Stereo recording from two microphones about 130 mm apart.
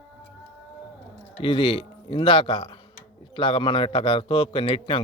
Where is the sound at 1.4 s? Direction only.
40° left (ahead or behind).